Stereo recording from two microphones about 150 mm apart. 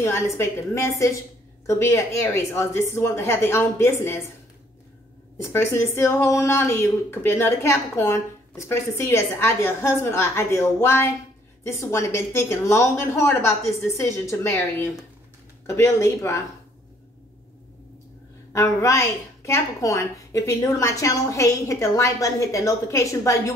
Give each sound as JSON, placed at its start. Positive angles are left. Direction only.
{"t": 0.0, "sound": "a woman's voice", "side_deg": 15}
{"t": 5.4, "sound": "a woman's voice", "side_deg": 20}
{"t": 18.5, "sound": "a woman's voice", "side_deg": 20}